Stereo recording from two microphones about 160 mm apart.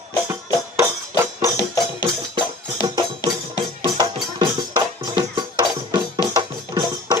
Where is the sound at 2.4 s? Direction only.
30° right (ahead or behind).